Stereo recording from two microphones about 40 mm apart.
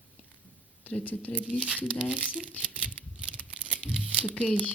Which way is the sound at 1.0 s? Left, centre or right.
Left.